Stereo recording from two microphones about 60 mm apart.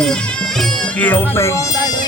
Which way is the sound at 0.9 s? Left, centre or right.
Left.